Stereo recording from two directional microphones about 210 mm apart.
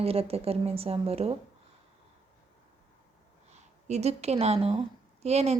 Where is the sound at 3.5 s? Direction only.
30° right (ahead or behind).